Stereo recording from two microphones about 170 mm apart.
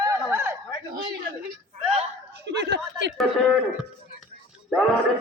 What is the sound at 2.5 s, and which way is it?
Chuckle, 80° right.